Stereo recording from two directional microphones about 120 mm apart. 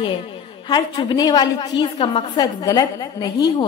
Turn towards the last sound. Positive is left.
turn(degrees=35)  # may be behind; listen again after turning